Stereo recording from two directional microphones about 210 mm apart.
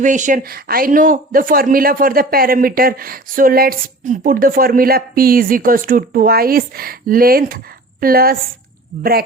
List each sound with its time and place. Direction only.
0.0 s speech: 35° right (ahead or behind)